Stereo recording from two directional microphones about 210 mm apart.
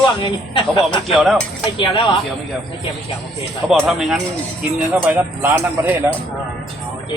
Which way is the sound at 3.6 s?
Centre (ahead or behind).